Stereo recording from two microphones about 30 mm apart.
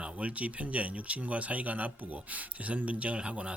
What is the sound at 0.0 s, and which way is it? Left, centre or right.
A man's voice, right.